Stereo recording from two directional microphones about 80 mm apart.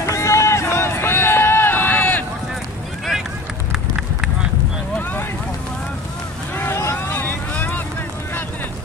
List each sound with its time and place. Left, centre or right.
0.0 s run: left
6.5 s vehicle: left